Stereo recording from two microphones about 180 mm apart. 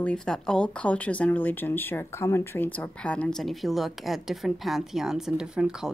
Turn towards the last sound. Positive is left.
turn(degrees=-5)  # may be behind; listen again after turning